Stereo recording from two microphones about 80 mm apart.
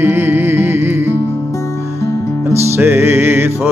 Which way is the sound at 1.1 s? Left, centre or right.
Left.